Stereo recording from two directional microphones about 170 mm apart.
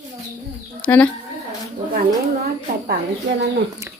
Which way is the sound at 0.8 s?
10° left (ahead or behind).